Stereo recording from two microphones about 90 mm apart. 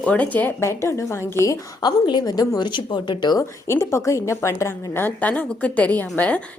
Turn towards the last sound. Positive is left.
turn(degrees=15)  # may be behind; listen again after turning